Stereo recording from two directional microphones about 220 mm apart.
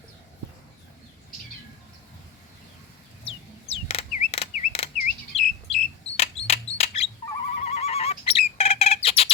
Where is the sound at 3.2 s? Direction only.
25° left (ahead or behind).